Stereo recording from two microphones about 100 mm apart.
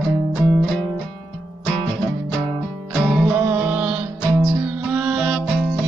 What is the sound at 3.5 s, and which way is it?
Music, 15° right (ahead or behind).